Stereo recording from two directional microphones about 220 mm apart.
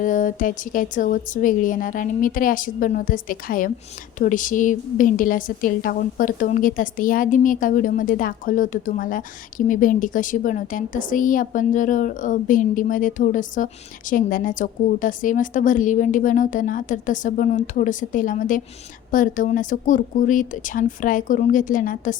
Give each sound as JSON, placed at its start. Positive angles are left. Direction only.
{"t": 0.0, "sound": "a woman's voice", "side_deg": 35}